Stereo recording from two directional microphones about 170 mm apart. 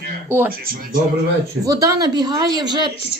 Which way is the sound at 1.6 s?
20° right (ahead or behind).